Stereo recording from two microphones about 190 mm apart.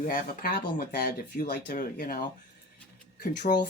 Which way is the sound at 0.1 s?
50° left (ahead or behind).